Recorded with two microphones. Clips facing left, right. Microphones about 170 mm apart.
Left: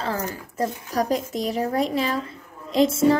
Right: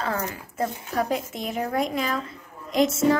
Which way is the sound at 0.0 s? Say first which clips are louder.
Left 1 dB; 35° left (ahead or behind).